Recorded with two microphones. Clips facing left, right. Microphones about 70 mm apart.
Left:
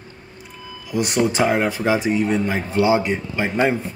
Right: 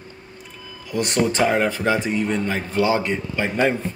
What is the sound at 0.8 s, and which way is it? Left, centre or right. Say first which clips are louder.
Speech: left 1 dB; centre.